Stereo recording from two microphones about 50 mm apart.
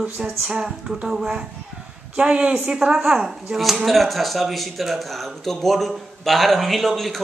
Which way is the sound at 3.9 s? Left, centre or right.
Centre.